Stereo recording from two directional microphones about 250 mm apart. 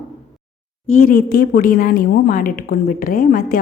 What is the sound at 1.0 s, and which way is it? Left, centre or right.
A woman's voice, left.